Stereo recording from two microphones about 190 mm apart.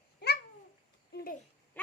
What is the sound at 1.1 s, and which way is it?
Speech, 50° left (ahead or behind).